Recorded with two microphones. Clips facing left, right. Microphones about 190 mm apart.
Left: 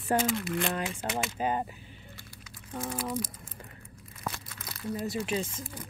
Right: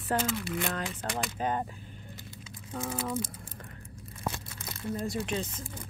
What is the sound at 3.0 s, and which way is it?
Speech, 25° right (ahead or behind).